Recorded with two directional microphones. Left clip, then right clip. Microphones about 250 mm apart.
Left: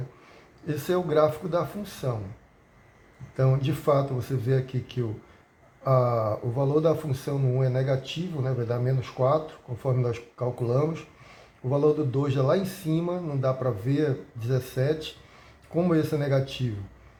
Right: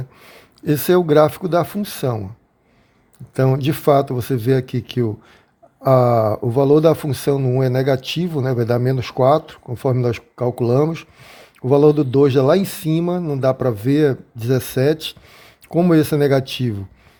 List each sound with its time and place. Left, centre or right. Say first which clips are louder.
0.2 s speech: right 9 dB; right
3.3 s speech: right 9 dB; right